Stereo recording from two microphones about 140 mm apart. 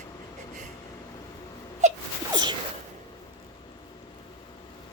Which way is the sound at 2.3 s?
35° right (ahead or behind).